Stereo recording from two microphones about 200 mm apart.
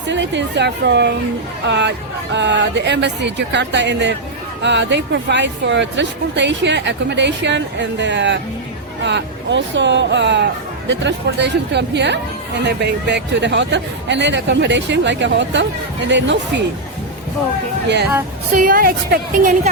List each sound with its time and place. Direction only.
0.1 s a woman's voice: 60° right (ahead or behind)
17.8 s a woman's voice: 55° right (ahead or behind)
18.5 s a woman's voice: 45° right (ahead or behind)